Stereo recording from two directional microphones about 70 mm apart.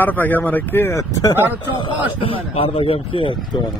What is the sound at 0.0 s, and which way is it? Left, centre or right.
Speech, left.